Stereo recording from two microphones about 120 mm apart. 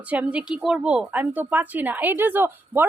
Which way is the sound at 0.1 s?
10° right (ahead or behind).